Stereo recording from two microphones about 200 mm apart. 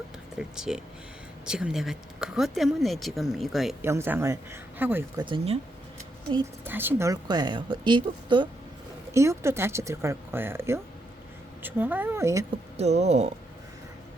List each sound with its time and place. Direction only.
0.3 s speech: 5° right (ahead or behind)
3.8 s speech: 10° right (ahead or behind)
5.2 s a woman's voice: 25° right (ahead or behind)
6.7 s a woman's voice: 10° right (ahead or behind)
12.7 s speech: 35° right (ahead or behind)